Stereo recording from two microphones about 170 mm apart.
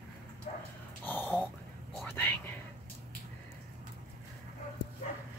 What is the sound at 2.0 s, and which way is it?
Whispering, 10° left (ahead or behind).